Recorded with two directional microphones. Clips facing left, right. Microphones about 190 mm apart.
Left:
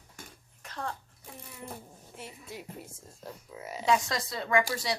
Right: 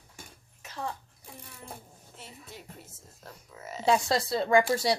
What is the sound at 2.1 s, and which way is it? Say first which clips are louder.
Speech: left 4 dB; 10° left (ahead or behind).